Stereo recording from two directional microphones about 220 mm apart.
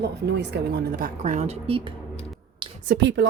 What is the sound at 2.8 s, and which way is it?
Speech, 50° right (ahead or behind).